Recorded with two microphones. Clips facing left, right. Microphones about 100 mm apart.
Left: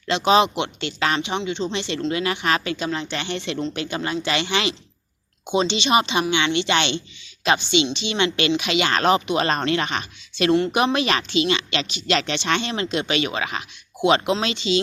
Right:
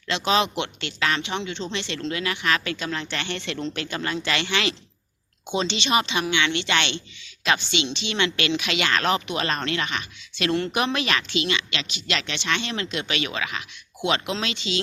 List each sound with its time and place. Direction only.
0.1 s speech: 20° left (ahead or behind)